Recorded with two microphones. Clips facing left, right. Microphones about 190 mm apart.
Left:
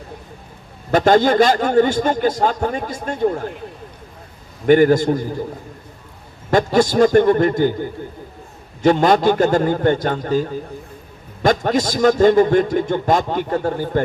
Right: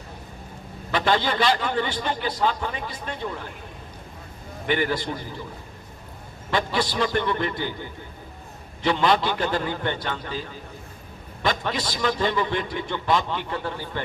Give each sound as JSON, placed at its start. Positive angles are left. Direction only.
{"t": 0.9, "sound": "a man's voice", "side_deg": 45}
{"t": 4.6, "sound": "a man's voice", "side_deg": 45}
{"t": 6.5, "sound": "a man's voice", "side_deg": 45}